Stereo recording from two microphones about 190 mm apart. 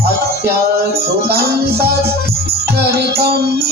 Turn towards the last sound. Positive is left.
turn(degrees=-55)  # may be behind; listen again after turning